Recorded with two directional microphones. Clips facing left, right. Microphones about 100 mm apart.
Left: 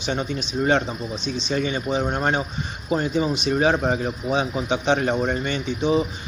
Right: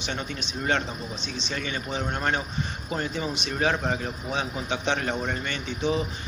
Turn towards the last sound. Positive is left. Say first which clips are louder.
# left 6 dB
turn(degrees=10)  # may be behind; listen again after turning